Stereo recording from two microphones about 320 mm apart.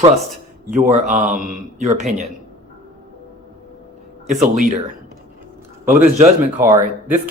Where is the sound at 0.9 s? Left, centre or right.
Right.